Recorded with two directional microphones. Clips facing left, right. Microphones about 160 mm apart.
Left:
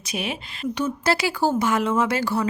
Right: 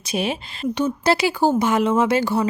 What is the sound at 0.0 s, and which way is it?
A woman's voice, 30° right (ahead or behind).